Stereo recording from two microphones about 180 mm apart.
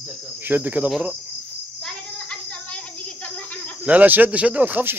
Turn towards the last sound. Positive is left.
turn(degrees=-10)  # may be behind; listen again after turning